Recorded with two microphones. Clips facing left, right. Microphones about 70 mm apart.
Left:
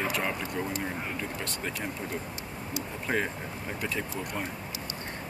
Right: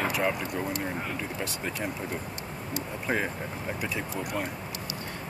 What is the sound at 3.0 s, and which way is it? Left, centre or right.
Speech, centre.